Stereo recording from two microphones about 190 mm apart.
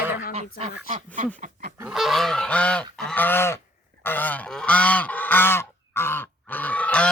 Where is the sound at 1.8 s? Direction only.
5° right (ahead or behind).